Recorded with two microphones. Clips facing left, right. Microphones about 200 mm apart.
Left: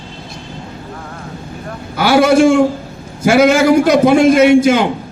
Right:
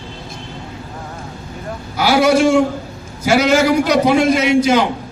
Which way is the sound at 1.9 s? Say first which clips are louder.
Left 3 dB; 55° left (ahead or behind).